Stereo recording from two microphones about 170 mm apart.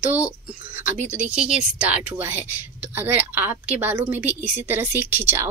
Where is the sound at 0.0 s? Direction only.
10° right (ahead or behind).